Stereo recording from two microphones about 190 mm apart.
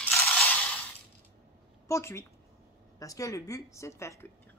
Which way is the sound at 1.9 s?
15° left (ahead or behind).